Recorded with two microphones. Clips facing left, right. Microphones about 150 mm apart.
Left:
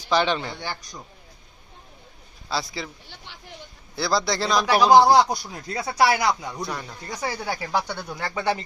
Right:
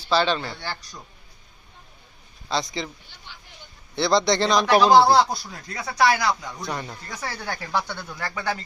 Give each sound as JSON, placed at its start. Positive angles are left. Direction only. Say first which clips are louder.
{"t": 0.0, "sound": "speech", "louder": "even", "side_deg": 15}
{"t": 2.5, "sound": "speech", "louder": "right 2 dB", "side_deg": 5}
{"t": 3.3, "sound": "speech", "louder": "right 1 dB", "side_deg": 80}
{"t": 3.9, "sound": "speech", "louder": "right 4 dB", "side_deg": 0}
{"t": 6.6, "sound": "speech", "louder": "even", "side_deg": 0}
{"t": 7.2, "sound": "speech", "louder": "left 4 dB", "side_deg": 10}